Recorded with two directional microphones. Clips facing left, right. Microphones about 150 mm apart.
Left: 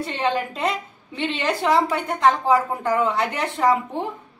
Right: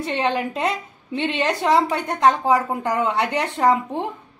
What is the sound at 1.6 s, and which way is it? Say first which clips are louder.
A woman's voice: even; 20° right (ahead or behind).